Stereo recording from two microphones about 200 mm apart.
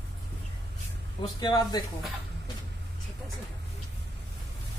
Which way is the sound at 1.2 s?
20° left (ahead or behind).